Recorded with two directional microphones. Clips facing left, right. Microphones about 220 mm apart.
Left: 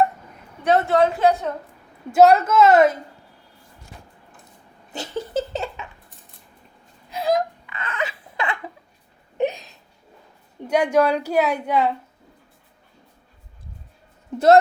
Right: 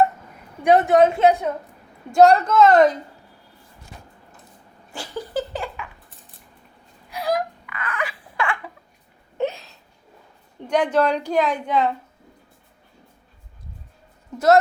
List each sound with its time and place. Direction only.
0.6 s a woman's voice: 15° right (ahead or behind)
2.1 s a woman's voice: 5° left (ahead or behind)
4.9 s laughter: 25° left (ahead or behind)
7.1 s a sound: 25° left (ahead or behind)
10.7 s a woman's voice: 10° left (ahead or behind)
14.3 s speech: 30° left (ahead or behind)